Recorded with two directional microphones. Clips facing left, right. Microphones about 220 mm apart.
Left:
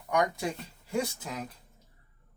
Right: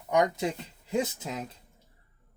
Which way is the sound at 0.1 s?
20° right (ahead or behind).